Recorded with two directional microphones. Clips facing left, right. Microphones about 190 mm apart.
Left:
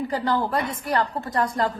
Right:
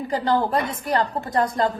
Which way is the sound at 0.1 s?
20° right (ahead or behind).